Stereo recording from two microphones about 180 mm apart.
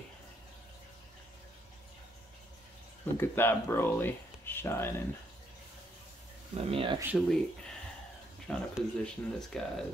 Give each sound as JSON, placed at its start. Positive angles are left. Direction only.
{"t": 3.2, "sound": "speech", "side_deg": 10}
{"t": 6.6, "sound": "speech", "side_deg": -30}
{"t": 7.2, "sound": "speech", "side_deg": 5}